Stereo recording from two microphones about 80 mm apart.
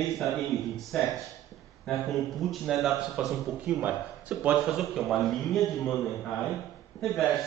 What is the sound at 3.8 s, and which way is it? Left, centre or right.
Speech, right.